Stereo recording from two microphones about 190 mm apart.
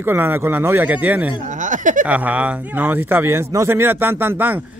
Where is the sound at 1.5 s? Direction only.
40° right (ahead or behind).